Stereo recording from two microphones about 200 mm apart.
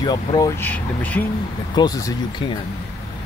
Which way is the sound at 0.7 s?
10° left (ahead or behind).